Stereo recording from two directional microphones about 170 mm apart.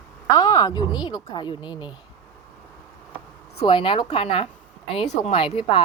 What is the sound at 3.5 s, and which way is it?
A woman's voice, 30° left (ahead or behind).